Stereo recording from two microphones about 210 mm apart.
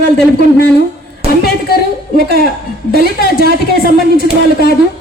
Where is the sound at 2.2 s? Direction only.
45° left (ahead or behind).